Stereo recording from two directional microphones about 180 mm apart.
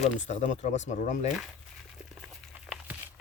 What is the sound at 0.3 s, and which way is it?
Speech, 40° left (ahead or behind).